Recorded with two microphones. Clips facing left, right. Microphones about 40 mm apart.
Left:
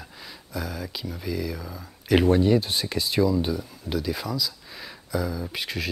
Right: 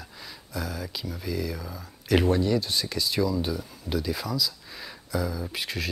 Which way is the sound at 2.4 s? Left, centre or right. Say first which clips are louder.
Left 4 dB; left.